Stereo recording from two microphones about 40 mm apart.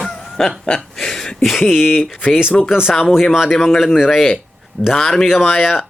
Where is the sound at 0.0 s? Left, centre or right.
Centre.